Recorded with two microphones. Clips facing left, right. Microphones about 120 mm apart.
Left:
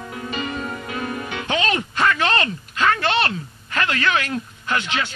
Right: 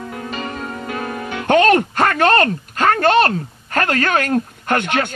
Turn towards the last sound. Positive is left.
turn(degrees=-55)  # may be behind; listen again after turning